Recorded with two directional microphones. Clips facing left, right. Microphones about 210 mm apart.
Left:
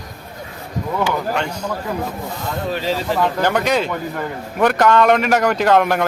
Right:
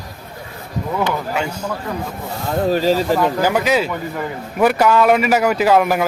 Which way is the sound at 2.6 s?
40° right (ahead or behind).